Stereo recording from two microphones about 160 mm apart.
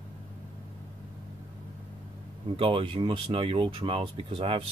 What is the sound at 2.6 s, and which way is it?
Speech, 35° right (ahead or behind).